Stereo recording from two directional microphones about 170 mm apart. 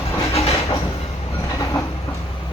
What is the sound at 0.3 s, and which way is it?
Train, 35° left (ahead or behind).